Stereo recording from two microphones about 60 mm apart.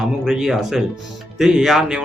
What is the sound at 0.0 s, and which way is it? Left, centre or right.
A man's voice, centre.